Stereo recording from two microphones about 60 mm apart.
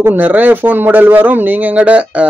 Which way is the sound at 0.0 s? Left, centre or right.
Right.